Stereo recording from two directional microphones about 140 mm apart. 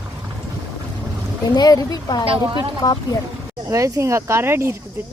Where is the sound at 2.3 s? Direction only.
35° right (ahead or behind).